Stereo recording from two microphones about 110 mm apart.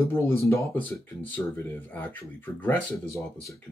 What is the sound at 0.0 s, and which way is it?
Speech, 25° left (ahead or behind).